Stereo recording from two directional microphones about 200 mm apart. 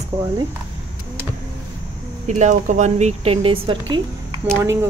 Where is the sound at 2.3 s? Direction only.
35° right (ahead or behind).